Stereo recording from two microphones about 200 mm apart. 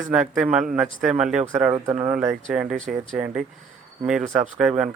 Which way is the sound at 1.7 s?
20° right (ahead or behind).